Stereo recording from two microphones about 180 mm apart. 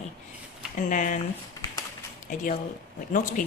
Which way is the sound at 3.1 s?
45° left (ahead or behind).